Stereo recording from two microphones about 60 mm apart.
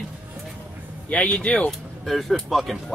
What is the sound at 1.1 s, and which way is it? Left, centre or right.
Speech, centre.